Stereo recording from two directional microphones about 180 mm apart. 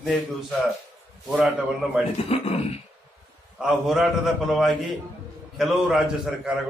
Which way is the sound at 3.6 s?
Centre (ahead or behind).